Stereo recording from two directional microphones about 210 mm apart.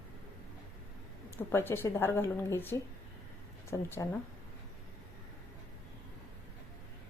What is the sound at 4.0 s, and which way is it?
Speech, 15° left (ahead or behind).